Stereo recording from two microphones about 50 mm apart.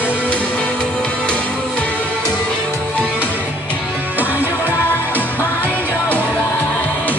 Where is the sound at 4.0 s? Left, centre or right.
Right.